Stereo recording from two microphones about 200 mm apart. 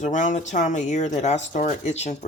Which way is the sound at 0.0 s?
40° left (ahead or behind).